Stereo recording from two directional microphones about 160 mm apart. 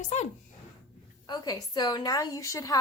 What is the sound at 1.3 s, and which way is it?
A woman's voice, 25° left (ahead or behind).